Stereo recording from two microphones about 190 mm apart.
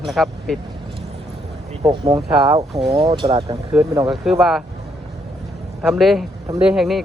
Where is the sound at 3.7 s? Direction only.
5° right (ahead or behind).